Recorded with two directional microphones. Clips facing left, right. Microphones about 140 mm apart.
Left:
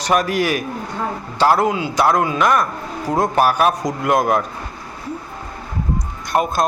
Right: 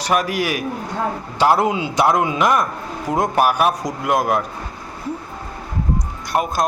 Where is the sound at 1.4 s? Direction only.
20° right (ahead or behind); by 4.4 s 5° right (ahead or behind).